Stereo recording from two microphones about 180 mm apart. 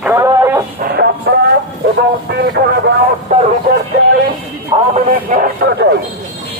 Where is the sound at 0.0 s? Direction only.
15° right (ahead or behind).